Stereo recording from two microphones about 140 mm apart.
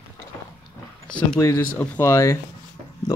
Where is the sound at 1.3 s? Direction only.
20° left (ahead or behind).